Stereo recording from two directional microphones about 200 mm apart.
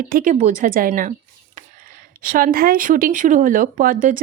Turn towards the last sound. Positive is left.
turn(degrees=-45)  # may be behind; listen again after turning